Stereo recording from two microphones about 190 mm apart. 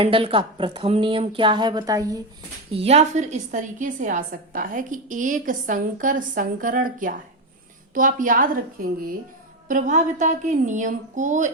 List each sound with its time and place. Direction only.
0.0 s speech: 30° right (ahead or behind)
2.7 s a woman's voice: 35° right (ahead or behind)